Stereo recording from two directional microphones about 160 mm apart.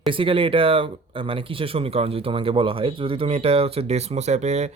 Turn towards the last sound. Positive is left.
turn(degrees=-45)  # may be behind; listen again after turning